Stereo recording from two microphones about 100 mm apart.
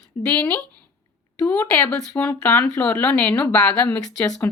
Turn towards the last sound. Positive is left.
turn(degrees=5)  # may be behind; listen again after turning